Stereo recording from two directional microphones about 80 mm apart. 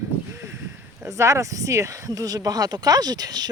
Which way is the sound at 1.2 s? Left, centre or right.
Right.